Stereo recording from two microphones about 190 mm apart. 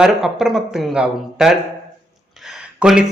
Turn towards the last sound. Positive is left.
turn(degrees=-5)  # may be behind; listen again after turning